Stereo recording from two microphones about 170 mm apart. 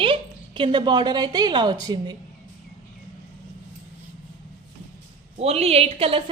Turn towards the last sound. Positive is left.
turn(degrees=-35)  # may be behind; listen again after turning